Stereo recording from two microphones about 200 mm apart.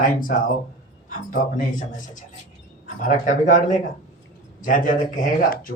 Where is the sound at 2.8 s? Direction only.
40° left (ahead or behind).